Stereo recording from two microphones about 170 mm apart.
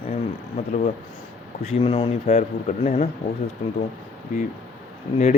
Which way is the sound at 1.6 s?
40° left (ahead or behind).